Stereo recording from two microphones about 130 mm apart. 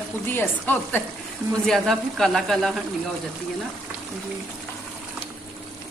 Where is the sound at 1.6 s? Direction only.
5° left (ahead or behind).